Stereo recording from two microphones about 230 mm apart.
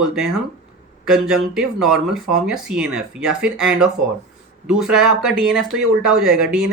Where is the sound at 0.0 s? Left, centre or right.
Centre.